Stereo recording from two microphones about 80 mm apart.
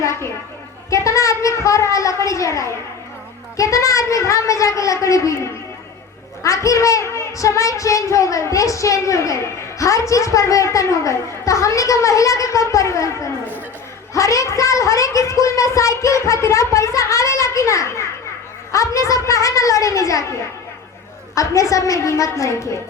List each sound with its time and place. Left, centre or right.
0.0 s a sound: left
0.9 s speech: left
14.1 s a woman's voice: left
21.3 s speech: left